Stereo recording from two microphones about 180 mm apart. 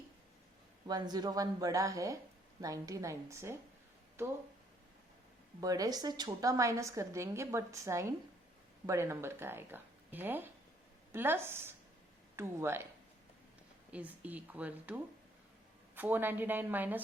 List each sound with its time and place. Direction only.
0.9 s a woman's voice: 20° right (ahead or behind)
5.5 s a woman's voice: 20° right (ahead or behind)
13.9 s a woman's voice: 10° right (ahead or behind)